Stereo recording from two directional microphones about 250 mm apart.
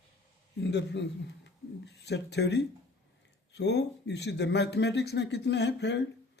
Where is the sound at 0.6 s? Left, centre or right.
Left.